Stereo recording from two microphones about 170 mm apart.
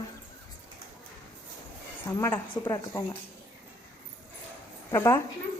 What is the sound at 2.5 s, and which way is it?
Speech, 25° left (ahead or behind).